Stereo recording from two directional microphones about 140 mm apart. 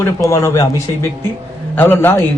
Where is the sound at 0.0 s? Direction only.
20° left (ahead or behind).